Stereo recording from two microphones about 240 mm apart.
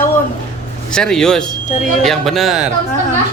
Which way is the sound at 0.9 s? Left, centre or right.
Centre.